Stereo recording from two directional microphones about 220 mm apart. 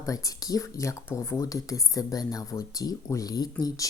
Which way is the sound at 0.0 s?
15° left (ahead or behind).